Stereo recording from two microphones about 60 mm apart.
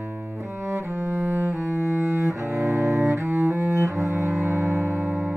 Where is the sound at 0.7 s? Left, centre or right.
Right.